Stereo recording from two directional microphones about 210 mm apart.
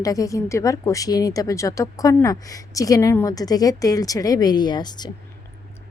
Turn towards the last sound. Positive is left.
turn(degrees=20)  # may be behind; listen again after turning